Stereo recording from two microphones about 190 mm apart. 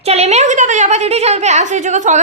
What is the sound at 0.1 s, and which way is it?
A woman's voice, 35° right (ahead or behind).